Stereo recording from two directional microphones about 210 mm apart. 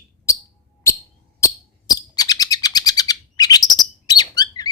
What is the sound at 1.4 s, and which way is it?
Bird, 15° left (ahead or behind).